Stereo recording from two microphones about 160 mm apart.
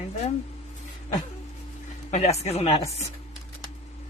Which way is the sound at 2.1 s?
40° left (ahead or behind).